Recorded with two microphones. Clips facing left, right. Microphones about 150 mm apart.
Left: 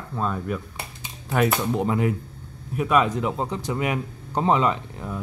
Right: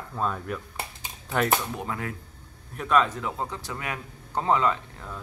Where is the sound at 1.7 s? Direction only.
25° left (ahead or behind).